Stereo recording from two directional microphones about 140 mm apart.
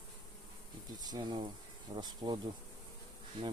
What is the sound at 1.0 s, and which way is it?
Speech, 30° right (ahead or behind).